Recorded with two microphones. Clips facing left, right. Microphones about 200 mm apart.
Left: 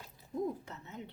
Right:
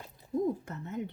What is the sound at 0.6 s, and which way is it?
Speech, 50° right (ahead or behind).